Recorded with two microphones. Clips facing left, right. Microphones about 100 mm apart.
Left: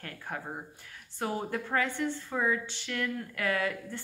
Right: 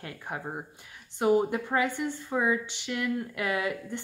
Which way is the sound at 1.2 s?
15° right (ahead or behind).